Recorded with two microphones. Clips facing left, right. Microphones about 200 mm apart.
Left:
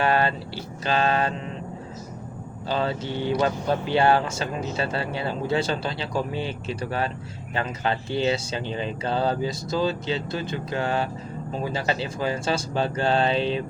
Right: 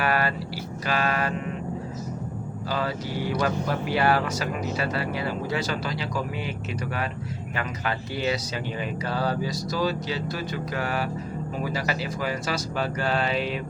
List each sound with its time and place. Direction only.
0.0 s vehicle: 25° left (ahead or behind)
0.9 s mantra: 25° left (ahead or behind)
2.6 s speech: 25° left (ahead or behind)